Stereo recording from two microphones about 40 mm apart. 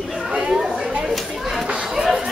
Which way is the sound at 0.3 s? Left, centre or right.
Right.